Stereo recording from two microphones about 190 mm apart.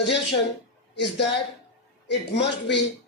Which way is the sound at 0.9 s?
65° left (ahead or behind).